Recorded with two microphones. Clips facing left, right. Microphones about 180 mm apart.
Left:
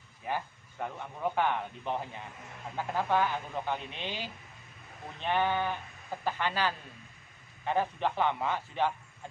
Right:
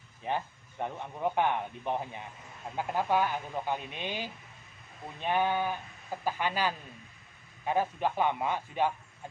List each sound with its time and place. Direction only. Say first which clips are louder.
0.3 s speech: right 2 dB; 20° right (ahead or behind)